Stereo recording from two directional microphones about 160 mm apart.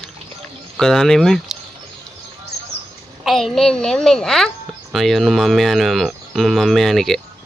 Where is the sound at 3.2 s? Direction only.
Centre (ahead or behind).